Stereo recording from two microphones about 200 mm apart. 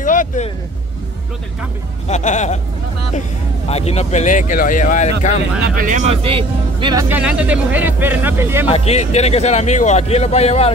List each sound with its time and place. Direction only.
0.0 s vehicle: 40° left (ahead or behind)
2.0 s a man's voice: 35° left (ahead or behind)
3.6 s a man's voice: 30° left (ahead or behind)
5.6 s speech: 40° right (ahead or behind); by 7.1 s 20° right (ahead or behind)
7.1 s speech: 5° right (ahead or behind)
8.6 s a man's voice: 30° left (ahead or behind)